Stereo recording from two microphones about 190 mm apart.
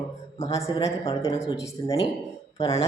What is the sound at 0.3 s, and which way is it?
Speech, 35° left (ahead or behind).